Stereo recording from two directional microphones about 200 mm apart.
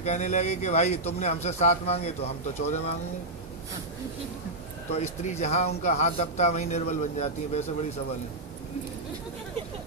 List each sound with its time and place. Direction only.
0.0 s a man's voice: 35° left (ahead or behind)
4.9 s a man's voice: 35° left (ahead or behind)